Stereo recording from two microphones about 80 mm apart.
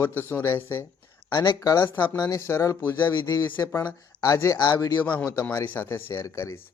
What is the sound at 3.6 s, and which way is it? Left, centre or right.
Speech, left.